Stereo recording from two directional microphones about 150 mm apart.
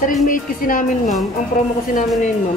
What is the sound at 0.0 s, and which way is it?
A woman's voice, 65° left (ahead or behind).